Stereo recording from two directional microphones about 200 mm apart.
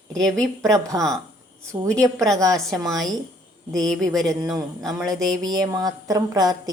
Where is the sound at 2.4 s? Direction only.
Centre (ahead or behind).